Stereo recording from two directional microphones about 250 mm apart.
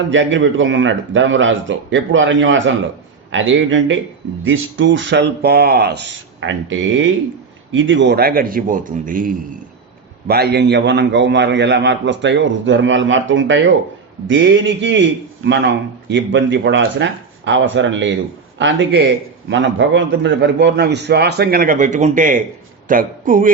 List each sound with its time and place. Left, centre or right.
0.1 s a man's voice: right